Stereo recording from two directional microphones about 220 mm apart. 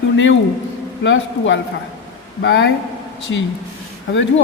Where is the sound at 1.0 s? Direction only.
60° left (ahead or behind).